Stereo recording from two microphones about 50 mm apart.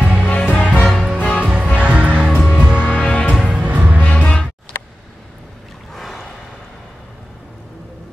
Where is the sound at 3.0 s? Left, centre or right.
Left.